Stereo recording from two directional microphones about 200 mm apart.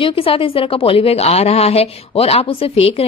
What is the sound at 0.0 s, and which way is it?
A woman's voice, 30° left (ahead or behind).